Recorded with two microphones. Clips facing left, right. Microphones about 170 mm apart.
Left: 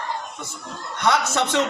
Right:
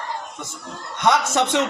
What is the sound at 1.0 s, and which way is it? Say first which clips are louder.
Speech: right 2 dB; 20° right (ahead or behind).